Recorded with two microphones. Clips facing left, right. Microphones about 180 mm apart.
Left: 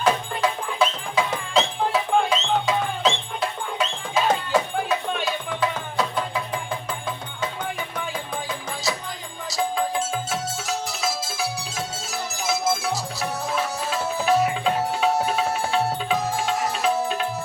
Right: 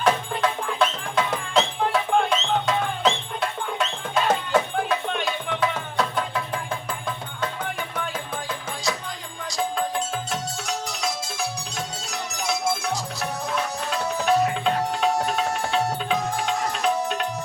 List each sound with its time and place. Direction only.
0.0 s music: centre (ahead or behind)
9.5 s music: centre (ahead or behind)